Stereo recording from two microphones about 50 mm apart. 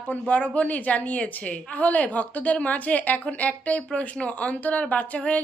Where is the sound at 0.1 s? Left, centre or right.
Left.